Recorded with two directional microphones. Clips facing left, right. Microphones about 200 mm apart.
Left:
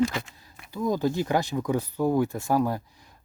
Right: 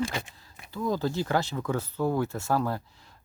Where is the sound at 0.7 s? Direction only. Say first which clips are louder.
Left 3 dB; 15° left (ahead or behind).